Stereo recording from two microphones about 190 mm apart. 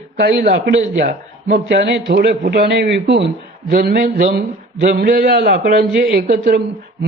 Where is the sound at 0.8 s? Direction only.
45° right (ahead or behind).